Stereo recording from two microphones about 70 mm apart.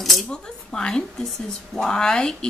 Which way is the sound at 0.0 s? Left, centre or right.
Centre.